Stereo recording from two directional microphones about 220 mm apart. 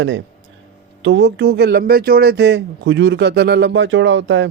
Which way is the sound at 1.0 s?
55° right (ahead or behind).